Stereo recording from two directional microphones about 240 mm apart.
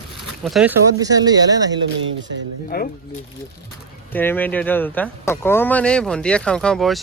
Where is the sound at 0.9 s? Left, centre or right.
Centre.